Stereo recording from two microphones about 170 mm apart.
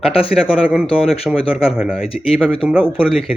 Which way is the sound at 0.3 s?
5° right (ahead or behind).